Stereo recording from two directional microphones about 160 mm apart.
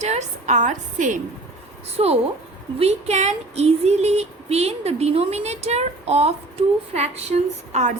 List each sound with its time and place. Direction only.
0.0 s a woman's voice: 45° right (ahead or behind)
2.0 s female singing: 40° right (ahead or behind)